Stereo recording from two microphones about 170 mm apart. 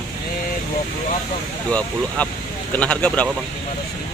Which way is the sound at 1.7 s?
5° left (ahead or behind).